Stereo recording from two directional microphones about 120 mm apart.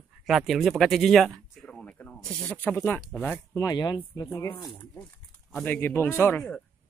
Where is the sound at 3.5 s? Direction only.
30° left (ahead or behind).